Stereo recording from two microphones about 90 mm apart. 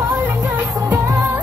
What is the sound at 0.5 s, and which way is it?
Music, 25° right (ahead or behind).